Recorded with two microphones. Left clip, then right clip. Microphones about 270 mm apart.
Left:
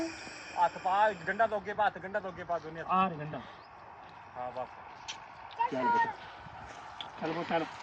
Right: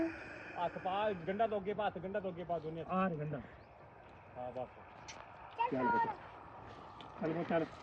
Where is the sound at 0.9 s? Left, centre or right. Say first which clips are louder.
Left 8 dB; left.